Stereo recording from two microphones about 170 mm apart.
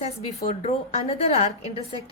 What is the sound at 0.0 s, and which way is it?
A woman's voice, 40° left (ahead or behind).